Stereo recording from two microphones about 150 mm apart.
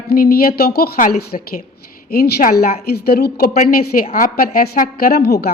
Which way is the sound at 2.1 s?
90° left.